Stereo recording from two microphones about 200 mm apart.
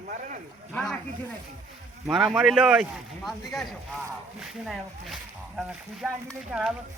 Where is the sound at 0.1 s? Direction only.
40° right (ahead or behind).